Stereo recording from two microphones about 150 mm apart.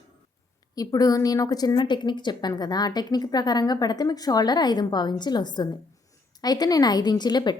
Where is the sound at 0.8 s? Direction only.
25° left (ahead or behind).